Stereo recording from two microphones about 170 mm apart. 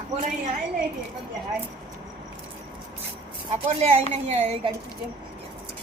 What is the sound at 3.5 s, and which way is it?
Speech, 40° right (ahead or behind).